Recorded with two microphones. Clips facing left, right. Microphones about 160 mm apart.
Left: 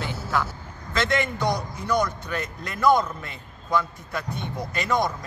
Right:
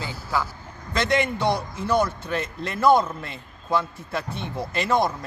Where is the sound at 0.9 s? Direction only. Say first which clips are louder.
Right 2 dB; 25° right (ahead or behind).